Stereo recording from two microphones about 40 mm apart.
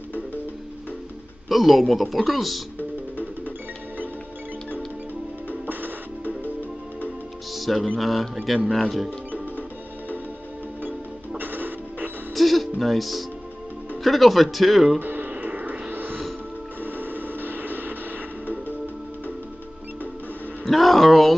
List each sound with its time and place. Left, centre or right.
1.5 s speech: centre
7.5 s music: centre
8.0 s speech: centre
9.3 s music: left
11.3 s music: right
12.4 s music: centre
14.0 s speech: centre
15.0 s music: right
16.8 s a sound: right
20.6 s a sound: centre